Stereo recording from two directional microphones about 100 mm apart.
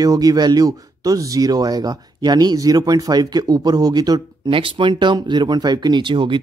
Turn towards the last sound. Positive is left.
turn(degrees=-55)  # may be behind; listen again after turning